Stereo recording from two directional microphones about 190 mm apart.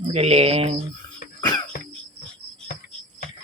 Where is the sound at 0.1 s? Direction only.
30° right (ahead or behind).